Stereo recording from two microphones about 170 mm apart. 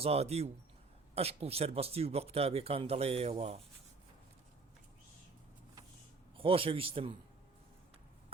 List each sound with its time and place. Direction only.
0.0 s speech: 35° right (ahead or behind)
6.3 s speech: 30° right (ahead or behind)